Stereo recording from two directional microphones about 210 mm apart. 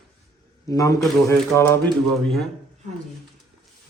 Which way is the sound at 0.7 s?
15° left (ahead or behind).